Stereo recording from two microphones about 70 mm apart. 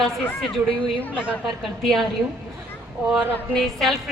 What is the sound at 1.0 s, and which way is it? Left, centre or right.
Speech, left.